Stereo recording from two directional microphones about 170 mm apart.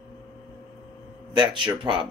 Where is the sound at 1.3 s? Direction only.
25° right (ahead or behind).